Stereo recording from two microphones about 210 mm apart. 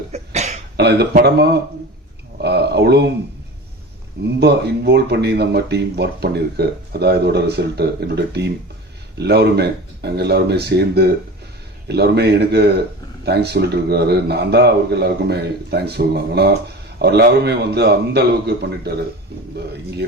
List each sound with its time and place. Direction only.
0.1 s cough: 30° right (ahead or behind)
0.8 s speech: 50° right (ahead or behind)
4.4 s speech: 50° right (ahead or behind)